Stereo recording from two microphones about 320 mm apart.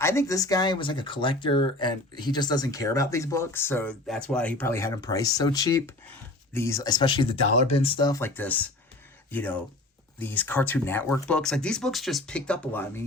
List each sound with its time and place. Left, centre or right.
0.0 s speech: centre